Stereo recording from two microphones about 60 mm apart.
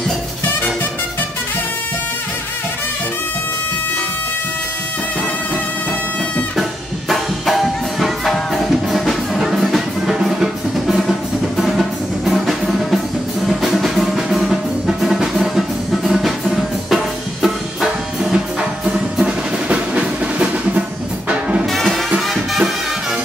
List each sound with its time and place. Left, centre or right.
7.1 s music: centre